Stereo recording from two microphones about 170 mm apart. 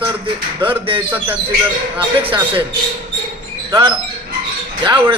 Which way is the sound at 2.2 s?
30° right (ahead or behind).